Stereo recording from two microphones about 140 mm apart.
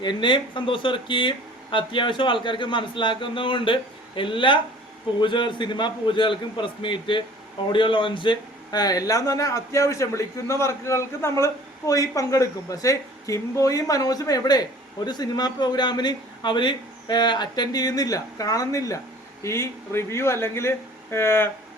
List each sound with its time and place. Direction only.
0.0 s speech: 35° left (ahead or behind); by 21.5 s 15° left (ahead or behind)